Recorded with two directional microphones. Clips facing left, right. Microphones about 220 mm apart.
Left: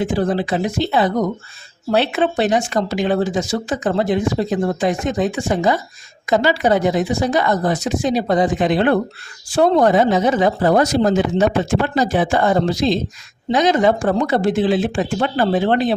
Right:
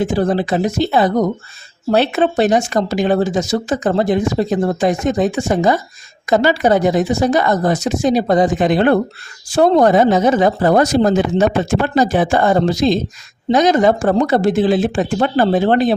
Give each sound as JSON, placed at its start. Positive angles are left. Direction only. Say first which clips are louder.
{"t": 0.0, "sound": "speech", "louder": "right 2 dB", "side_deg": -40}